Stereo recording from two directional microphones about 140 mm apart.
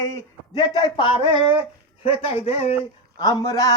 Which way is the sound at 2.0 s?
45° left (ahead or behind).